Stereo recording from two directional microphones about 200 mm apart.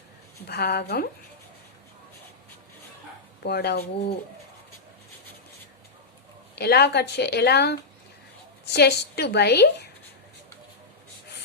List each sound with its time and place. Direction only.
0.4 s a woman's voice: 50° left (ahead or behind)
3.4 s a woman's voice: 55° left (ahead or behind)
6.6 s a woman's voice: 55° left (ahead or behind)